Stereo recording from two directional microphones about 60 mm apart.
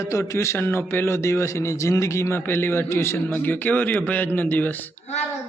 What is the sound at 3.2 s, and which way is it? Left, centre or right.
A man's voice, left.